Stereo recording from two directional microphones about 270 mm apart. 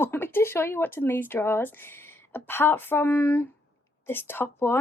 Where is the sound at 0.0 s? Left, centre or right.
Centre.